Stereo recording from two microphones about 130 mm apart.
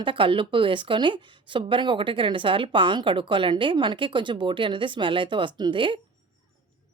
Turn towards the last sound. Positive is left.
turn(degrees=-40)  # may be behind; listen again after turning